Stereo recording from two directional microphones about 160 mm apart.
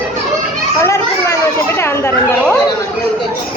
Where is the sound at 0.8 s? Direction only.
15° left (ahead or behind).